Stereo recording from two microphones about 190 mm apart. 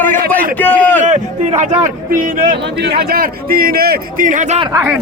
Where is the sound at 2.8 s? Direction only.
55° right (ahead or behind); by 4.7 s 35° right (ahead or behind).